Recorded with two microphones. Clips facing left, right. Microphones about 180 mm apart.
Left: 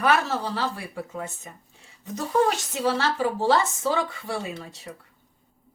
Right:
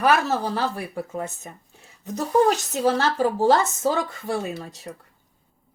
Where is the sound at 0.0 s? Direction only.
45° right (ahead or behind).